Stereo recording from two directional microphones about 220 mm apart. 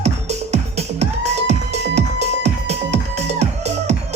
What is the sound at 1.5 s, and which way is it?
Music, 30° right (ahead or behind).